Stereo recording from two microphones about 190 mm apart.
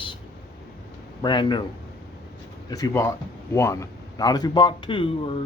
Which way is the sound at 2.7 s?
15° left (ahead or behind).